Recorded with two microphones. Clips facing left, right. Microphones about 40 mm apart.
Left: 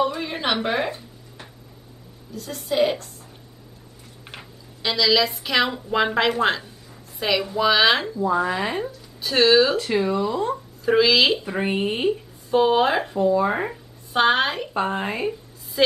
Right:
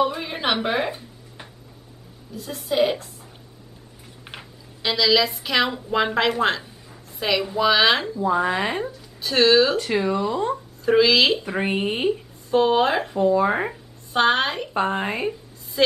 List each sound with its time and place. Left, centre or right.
0.0 s speech: centre
4.3 s speech: centre
8.3 s speech: centre
13.2 s speech: centre
14.1 s a woman's voice: centre